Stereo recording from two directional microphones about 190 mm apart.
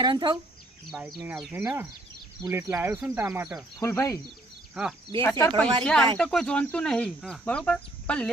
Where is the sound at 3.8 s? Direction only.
15° left (ahead or behind).